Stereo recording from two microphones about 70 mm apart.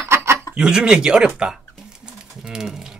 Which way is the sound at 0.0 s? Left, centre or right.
Right.